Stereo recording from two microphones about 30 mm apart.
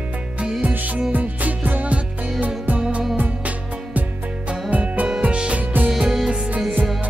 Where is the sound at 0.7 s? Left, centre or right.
Right.